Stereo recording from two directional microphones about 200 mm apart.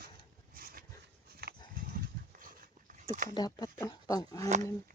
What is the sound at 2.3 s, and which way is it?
Dog, 45° right (ahead or behind).